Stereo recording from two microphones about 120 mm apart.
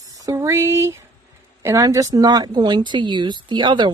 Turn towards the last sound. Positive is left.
turn(degrees=-40)  # may be behind; listen again after turning